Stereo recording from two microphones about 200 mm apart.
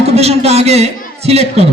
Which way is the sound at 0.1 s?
30° right (ahead or behind).